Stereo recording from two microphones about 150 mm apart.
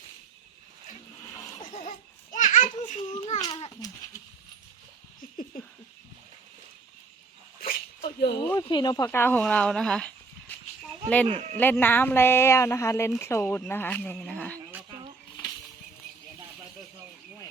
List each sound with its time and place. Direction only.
1.3 s a sound: 20° left (ahead or behind)
1.7 s baby laughter: 50° left (ahead or behind)
3.2 s a sound: 45° left (ahead or behind)
3.8 s goat: 30° left (ahead or behind)
7.6 s a sound: 80° left
8.7 s speech: 30° left (ahead or behind)
9.0 s speech: 15° left (ahead or behind)
11.3 s a man's voice: 50° right (ahead or behind)
11.5 s speech: 15° left (ahead or behind)